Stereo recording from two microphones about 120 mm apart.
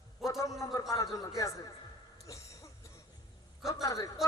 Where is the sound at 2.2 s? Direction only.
25° left (ahead or behind).